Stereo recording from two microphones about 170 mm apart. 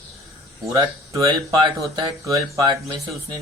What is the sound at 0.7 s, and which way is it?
Speech, 20° right (ahead or behind).